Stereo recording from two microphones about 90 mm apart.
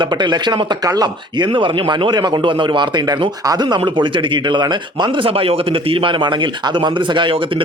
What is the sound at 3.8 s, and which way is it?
Speech, 65° right (ahead or behind).